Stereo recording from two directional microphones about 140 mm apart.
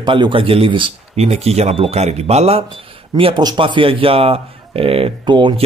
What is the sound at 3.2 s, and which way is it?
Speech, 35° right (ahead or behind).